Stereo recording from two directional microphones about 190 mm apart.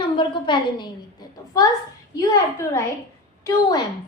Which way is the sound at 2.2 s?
15° left (ahead or behind).